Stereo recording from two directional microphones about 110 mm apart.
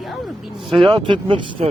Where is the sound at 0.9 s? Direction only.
50° right (ahead or behind).